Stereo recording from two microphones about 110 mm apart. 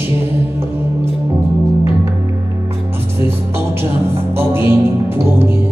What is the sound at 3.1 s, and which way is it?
Music, 20° right (ahead or behind).